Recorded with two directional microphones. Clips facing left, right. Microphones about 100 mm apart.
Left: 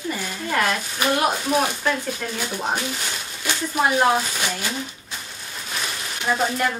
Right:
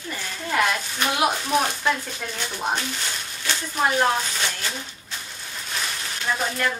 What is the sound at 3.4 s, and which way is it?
Speech, 10° left (ahead or behind).